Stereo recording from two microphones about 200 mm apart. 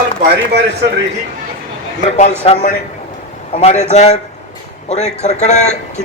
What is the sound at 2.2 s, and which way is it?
Speech, 35° left (ahead or behind).